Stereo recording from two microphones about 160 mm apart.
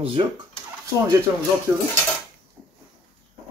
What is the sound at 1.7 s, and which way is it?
Cutlery, 15° right (ahead or behind).